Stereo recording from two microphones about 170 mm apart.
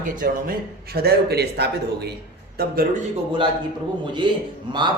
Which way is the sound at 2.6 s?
65° right (ahead or behind).